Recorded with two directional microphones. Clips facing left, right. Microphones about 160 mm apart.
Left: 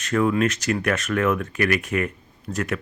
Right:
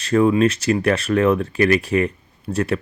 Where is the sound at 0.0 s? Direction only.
30° right (ahead or behind).